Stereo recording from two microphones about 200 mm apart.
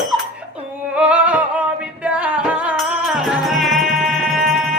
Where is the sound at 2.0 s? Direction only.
5° right (ahead or behind).